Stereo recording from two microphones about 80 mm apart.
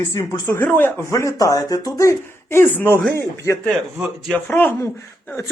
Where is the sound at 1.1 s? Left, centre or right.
Left.